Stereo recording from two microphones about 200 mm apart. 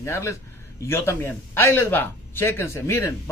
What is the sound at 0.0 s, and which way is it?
Speech, 15° left (ahead or behind).